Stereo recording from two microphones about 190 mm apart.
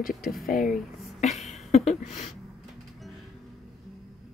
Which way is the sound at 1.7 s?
35° left (ahead or behind).